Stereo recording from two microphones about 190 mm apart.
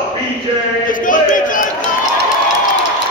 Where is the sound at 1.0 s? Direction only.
45° left (ahead or behind).